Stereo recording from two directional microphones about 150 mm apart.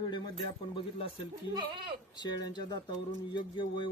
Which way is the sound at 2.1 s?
30° left (ahead or behind).